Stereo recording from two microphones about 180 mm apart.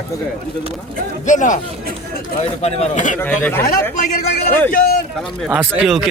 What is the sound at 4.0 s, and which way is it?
A man's voice, 50° left (ahead or behind).